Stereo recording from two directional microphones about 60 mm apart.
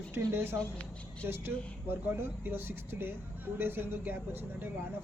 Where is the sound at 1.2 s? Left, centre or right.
Right.